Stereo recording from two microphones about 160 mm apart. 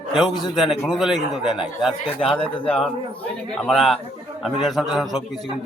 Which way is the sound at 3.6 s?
Centre (ahead or behind).